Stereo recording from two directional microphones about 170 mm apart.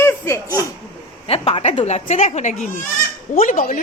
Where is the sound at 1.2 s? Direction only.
35° left (ahead or behind).